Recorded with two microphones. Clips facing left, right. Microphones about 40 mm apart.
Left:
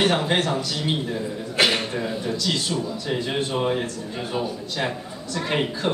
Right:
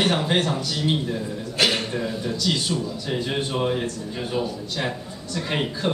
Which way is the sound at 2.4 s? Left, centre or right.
Centre.